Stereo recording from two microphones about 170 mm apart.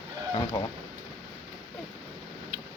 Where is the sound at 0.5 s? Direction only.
25° left (ahead or behind).